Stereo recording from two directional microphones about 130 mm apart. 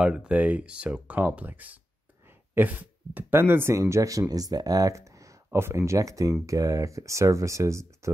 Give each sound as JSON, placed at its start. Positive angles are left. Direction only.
{"t": 0.0, "sound": "speech", "side_deg": -5}